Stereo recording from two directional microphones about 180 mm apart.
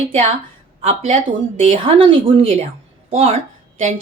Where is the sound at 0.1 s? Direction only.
40° right (ahead or behind).